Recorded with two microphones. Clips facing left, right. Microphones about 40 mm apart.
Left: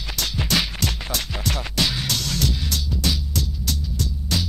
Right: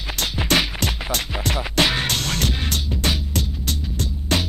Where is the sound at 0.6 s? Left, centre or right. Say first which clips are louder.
Right 2 dB; right.